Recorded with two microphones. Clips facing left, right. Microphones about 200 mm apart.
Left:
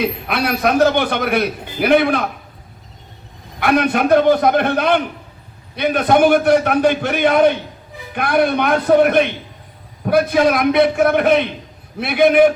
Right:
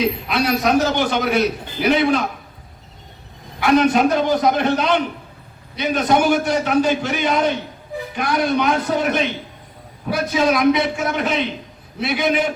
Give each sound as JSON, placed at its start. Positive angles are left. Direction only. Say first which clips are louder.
{"t": 0.0, "sound": "a man's voice", "louder": "even", "side_deg": 55}
{"t": 3.6, "sound": "a man's voice", "louder": "right 1 dB", "side_deg": 55}